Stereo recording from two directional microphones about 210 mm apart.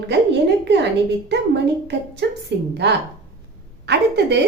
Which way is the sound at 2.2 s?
55° right (ahead or behind).